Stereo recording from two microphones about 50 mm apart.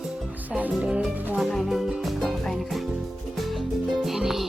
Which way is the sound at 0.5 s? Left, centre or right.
Right.